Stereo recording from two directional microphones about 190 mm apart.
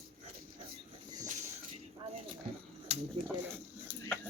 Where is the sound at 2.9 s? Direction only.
35° right (ahead or behind).